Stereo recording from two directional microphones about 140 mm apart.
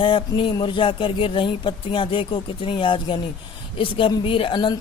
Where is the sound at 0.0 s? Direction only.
40° left (ahead or behind).